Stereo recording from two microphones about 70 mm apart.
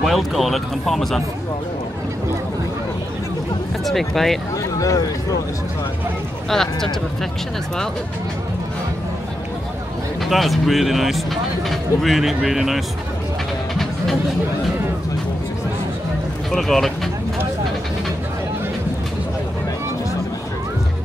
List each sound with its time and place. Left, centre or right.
0.0 s speech: centre
3.8 s speech: centre
4.7 s speech: left
6.5 s speech: centre
10.2 s speech: centre
16.5 s speech: centre